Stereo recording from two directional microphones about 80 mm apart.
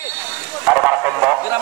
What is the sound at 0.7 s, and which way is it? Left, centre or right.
Speech, centre.